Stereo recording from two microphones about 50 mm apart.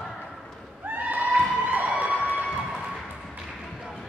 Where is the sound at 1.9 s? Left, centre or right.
Right.